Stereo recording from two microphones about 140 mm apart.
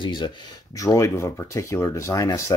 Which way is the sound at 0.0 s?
30° left (ahead or behind).